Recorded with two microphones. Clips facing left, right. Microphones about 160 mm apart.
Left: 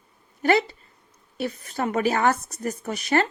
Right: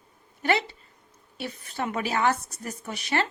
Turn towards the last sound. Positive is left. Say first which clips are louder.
# left 5 dB
turn(degrees=45)  # may be behind; listen again after turning